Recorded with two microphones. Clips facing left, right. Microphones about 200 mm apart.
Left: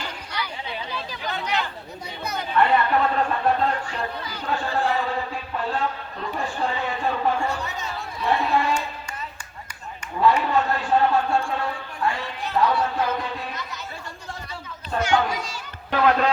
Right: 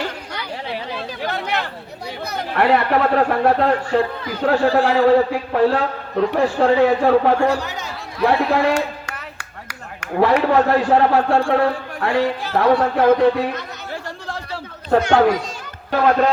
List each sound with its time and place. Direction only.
0.3 s chatter: 55° right (ahead or behind)
2.2 s speech: 75° right (ahead or behind)
4.4 s a man's voice: 85° right
12.7 s chatter: 60° right (ahead or behind)
15.9 s speech: 45° right (ahead or behind)